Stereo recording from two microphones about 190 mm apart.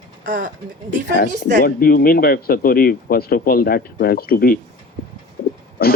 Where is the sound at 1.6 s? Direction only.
50° left (ahead or behind).